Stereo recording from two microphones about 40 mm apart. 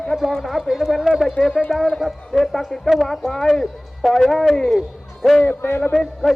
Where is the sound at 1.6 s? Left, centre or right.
Centre.